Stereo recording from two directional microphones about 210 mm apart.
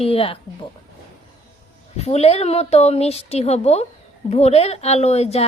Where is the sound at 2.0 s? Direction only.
30° left (ahead or behind).